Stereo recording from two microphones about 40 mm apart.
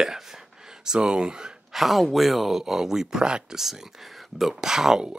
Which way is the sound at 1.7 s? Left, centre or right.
Centre.